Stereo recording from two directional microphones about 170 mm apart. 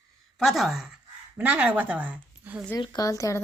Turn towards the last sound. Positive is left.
turn(degrees=20)  # may be behind; listen again after turning